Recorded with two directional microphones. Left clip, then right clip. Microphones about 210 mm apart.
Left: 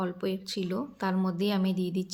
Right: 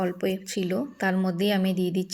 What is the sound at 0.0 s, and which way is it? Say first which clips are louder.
A woman's voice: right 5 dB; centre (ahead or behind).